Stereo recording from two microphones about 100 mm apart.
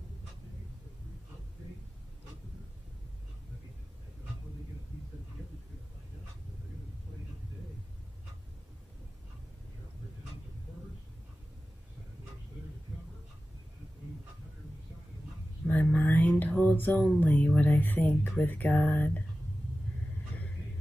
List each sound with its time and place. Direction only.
15.7 s mantra: 15° left (ahead or behind)
17.2 s speech: 15° left (ahead or behind)